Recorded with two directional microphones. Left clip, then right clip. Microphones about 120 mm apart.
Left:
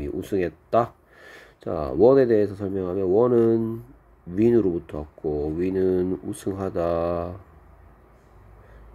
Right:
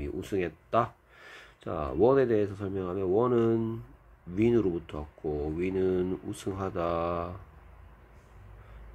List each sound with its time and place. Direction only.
0.0 s speech: 15° left (ahead or behind)